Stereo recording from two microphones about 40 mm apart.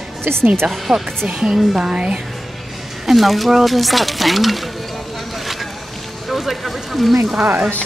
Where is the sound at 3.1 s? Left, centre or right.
Centre.